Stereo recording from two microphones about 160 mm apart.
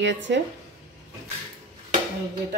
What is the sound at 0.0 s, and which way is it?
Speech, 90° right.